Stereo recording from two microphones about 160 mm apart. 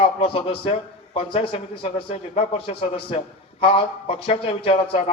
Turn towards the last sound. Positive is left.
turn(degrees=40)  # may be behind; listen again after turning